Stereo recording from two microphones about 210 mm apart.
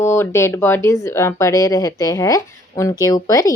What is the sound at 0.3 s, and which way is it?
A woman's voice, 10° left (ahead or behind).